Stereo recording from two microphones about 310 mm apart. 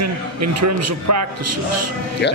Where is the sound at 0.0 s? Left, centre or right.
Right.